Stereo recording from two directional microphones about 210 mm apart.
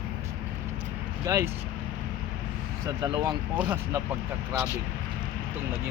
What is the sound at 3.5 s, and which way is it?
Speech, 10° right (ahead or behind).